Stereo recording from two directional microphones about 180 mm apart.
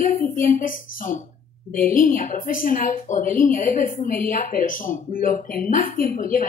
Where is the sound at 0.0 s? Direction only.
45° left (ahead or behind).